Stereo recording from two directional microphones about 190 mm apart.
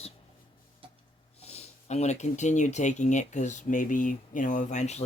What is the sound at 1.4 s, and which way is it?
Speech, 35° left (ahead or behind).